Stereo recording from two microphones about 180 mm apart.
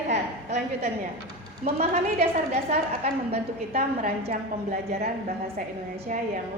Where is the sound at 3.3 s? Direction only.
35° right (ahead or behind).